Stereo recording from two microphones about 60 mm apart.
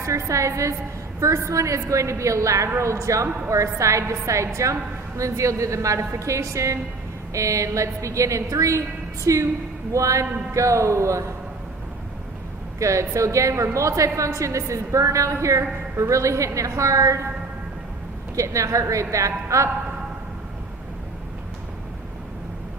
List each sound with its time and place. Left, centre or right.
0.0 s a woman's voice: right
12.8 s a woman's voice: right
18.3 s a woman's voice: right